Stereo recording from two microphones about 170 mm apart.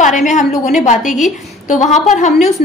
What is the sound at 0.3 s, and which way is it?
Speech, 45° left (ahead or behind).